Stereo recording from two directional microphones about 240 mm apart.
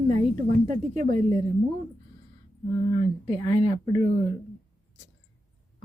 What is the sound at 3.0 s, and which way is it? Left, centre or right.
A woman's voice, right.